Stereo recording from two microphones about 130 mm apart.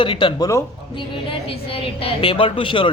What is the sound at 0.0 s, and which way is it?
Speech, 40° left (ahead or behind).